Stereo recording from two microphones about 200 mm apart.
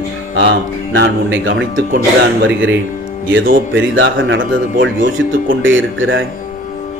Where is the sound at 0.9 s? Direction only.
70° right (ahead or behind).